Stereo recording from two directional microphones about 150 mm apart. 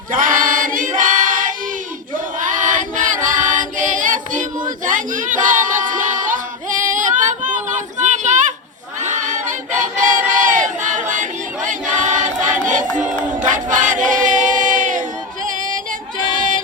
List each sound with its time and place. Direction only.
0.1 s choir: 65° right (ahead or behind)
4.9 s a sound: 60° right (ahead or behind)
6.8 s child singing: 60° right (ahead or behind)
9.0 s crowd: 55° right (ahead or behind)
15.4 s music: 60° right (ahead or behind)